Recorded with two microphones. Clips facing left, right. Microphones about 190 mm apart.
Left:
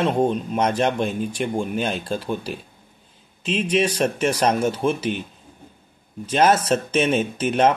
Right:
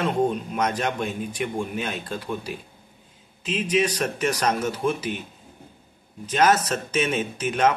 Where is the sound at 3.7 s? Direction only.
30° left (ahead or behind).